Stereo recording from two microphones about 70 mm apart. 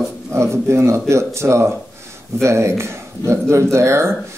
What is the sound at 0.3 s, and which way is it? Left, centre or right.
Speech, right.